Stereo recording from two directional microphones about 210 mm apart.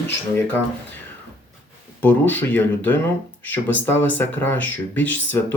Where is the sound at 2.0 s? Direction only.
10° left (ahead or behind).